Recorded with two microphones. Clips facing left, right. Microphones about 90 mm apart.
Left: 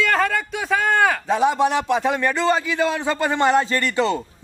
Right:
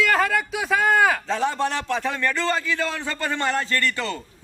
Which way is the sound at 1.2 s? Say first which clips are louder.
Left 5 dB; 15° left (ahead or behind).